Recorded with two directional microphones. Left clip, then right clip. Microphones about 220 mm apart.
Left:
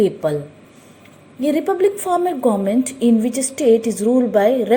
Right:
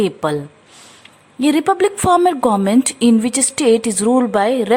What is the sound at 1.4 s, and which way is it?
A woman's voice, 30° right (ahead or behind).